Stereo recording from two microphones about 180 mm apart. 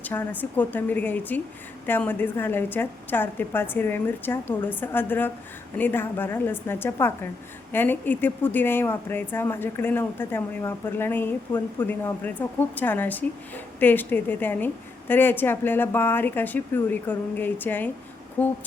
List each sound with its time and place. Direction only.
0.0 s speech: 10° left (ahead or behind)